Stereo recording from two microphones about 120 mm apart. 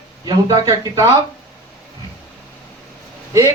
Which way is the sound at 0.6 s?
30° right (ahead or behind).